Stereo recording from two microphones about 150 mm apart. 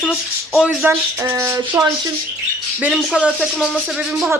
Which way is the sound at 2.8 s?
10° right (ahead or behind).